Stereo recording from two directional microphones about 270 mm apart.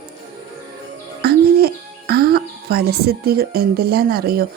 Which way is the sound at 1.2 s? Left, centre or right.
Right.